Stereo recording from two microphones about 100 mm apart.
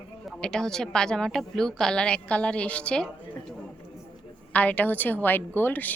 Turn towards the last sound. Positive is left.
turn(degrees=15)  # may be behind; listen again after turning